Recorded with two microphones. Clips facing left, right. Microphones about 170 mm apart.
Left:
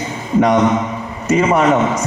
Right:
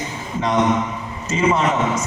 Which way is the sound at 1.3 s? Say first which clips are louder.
Left 6 dB; 65° left (ahead or behind).